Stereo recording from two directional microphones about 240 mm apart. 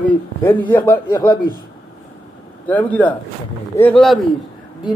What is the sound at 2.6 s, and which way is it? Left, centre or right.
A man's voice, centre.